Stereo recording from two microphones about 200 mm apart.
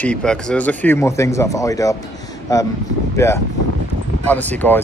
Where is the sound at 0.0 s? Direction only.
5° left (ahead or behind).